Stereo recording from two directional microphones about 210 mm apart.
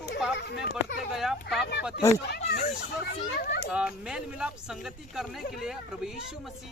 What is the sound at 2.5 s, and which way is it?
A child's voice, 50° left (ahead or behind).